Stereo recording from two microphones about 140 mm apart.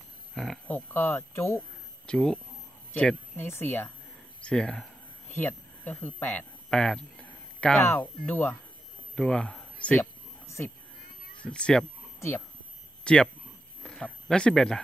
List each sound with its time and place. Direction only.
0.3 s a sound: 5° left (ahead or behind)
0.7 s speech: 15° left (ahead or behind)
2.0 s speech: 5° left (ahead or behind)
5.3 s a sound: 15° left (ahead or behind)
7.8 s speech: 15° left (ahead or behind)
10.4 s a sound: 20° left (ahead or behind)
11.4 s speech: 5° left (ahead or behind)
12.2 s speech: 20° left (ahead or behind)
13.0 s speech: 5° left (ahead or behind)